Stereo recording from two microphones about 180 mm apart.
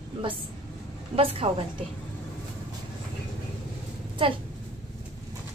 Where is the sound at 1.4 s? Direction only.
35° right (ahead or behind).